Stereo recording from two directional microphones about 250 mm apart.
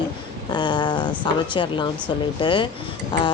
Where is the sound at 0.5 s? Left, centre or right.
Centre.